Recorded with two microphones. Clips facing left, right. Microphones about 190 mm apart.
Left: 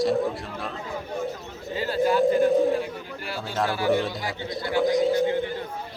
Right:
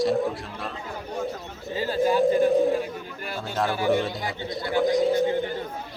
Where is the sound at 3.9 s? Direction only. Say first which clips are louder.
Even; centre (ahead or behind).